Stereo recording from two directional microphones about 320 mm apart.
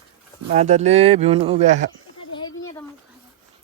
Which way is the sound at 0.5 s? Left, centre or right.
Right.